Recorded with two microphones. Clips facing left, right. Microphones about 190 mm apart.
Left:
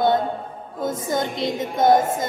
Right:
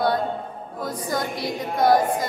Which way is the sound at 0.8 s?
25° left (ahead or behind).